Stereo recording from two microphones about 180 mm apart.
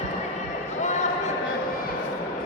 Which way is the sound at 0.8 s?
40° left (ahead or behind).